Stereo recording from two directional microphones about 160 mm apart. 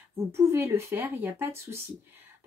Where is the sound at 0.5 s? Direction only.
15° right (ahead or behind).